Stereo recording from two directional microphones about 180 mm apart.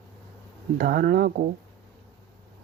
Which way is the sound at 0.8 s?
55° right (ahead or behind).